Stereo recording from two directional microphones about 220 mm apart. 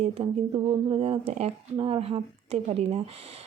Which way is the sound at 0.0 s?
25° right (ahead or behind).